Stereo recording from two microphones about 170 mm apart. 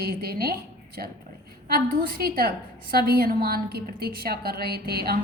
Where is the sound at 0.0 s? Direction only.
65° right (ahead or behind).